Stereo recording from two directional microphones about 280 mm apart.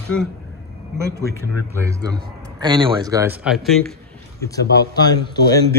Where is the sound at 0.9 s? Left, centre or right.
Centre.